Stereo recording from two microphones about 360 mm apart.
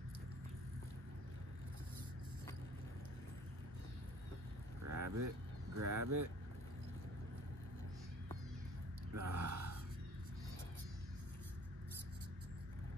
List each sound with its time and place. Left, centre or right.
4.8 s vehicle: right
5.8 s speech: right
9.1 s gasp: right